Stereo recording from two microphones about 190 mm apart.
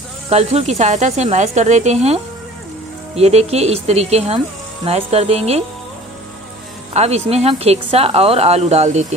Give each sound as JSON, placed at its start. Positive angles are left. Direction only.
{"t": 0.3, "sound": "speech", "side_deg": -35}
{"t": 3.2, "sound": "speech", "side_deg": -35}
{"t": 6.9, "sound": "speech", "side_deg": -35}